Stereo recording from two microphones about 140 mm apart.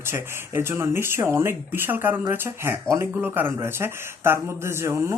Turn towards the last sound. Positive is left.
turn(degrees=-20)  # may be behind; listen again after turning